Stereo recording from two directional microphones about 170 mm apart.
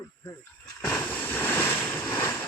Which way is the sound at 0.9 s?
10° left (ahead or behind).